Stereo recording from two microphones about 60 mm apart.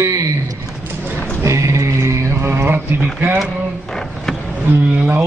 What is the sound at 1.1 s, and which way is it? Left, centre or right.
Clip-clop, left.